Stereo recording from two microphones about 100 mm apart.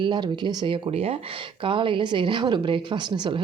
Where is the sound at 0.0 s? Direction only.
50° right (ahead or behind).